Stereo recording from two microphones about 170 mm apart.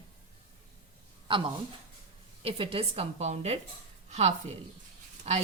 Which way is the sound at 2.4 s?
35° right (ahead or behind).